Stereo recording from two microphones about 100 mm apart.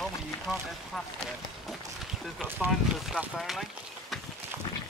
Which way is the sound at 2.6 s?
Centre (ahead or behind).